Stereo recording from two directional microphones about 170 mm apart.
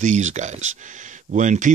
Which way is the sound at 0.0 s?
45° right (ahead or behind).